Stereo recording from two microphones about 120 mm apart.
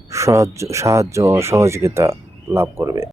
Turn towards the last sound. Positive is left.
turn(degrees=-25)  # may be behind; listen again after turning